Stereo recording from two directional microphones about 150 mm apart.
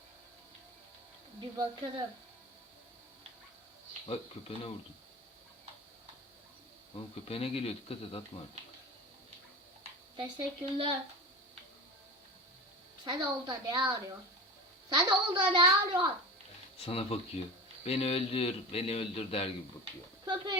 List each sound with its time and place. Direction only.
1.4 s a woman's voice: 30° right (ahead or behind)
4.0 s a man's voice: 40° left (ahead or behind)
6.9 s a man's voice: 40° left (ahead or behind)
10.2 s a child's voice: 35° right (ahead or behind)
13.1 s a woman's voice: 30° right (ahead or behind)
16.8 s a man's voice: 40° left (ahead or behind)
20.2 s speech: 30° right (ahead or behind)